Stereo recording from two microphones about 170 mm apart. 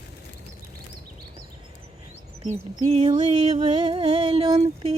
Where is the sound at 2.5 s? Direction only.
40° right (ahead or behind).